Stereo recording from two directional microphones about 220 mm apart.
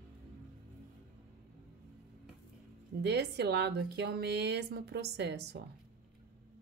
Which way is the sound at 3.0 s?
50° right (ahead or behind).